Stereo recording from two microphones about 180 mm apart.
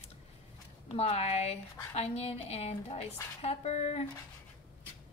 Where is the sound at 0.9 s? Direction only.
35° left (ahead or behind).